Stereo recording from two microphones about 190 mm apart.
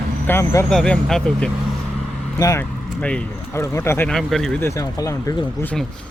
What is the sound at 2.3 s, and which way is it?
Speech, 15° left (ahead or behind).